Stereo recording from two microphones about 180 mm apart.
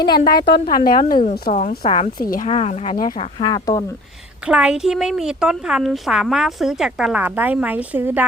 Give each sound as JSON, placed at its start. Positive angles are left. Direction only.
{"t": 0.0, "sound": "speech", "side_deg": 25}
{"t": 0.6, "sound": "a woman's voice", "side_deg": 50}
{"t": 1.8, "sound": "speech", "side_deg": 35}
{"t": 2.1, "sound": "a woman's voice", "side_deg": 50}
{"t": 2.5, "sound": "speech", "side_deg": 35}
{"t": 3.3, "sound": "speech", "side_deg": 20}
{"t": 4.4, "sound": "a woman's voice", "side_deg": -5}